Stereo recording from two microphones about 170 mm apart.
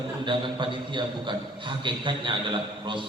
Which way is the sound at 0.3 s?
30° right (ahead or behind).